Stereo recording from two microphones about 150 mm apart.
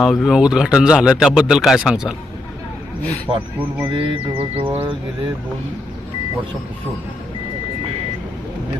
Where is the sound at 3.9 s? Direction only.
35° right (ahead or behind).